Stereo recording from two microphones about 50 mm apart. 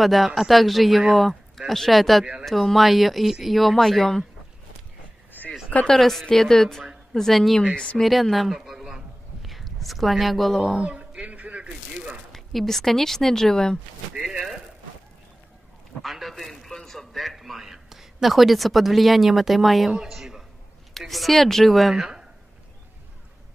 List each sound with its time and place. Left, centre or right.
0.0 s speech: centre
5.9 s speech: centre
7.7 s speech: left
8.0 s a sound: centre
9.5 s speech: centre
10.8 s a sound: right
12.3 s speech: centre
16.0 s a sound: centre
20.9 s a woman's voice: centre